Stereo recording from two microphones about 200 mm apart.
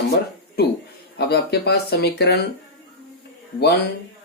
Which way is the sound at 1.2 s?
55° left (ahead or behind).